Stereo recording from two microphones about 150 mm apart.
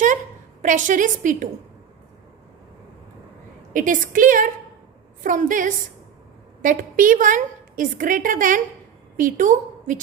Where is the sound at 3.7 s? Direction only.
60° right (ahead or behind).